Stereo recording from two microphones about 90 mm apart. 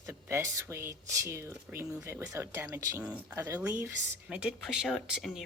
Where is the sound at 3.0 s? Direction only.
15° right (ahead or behind).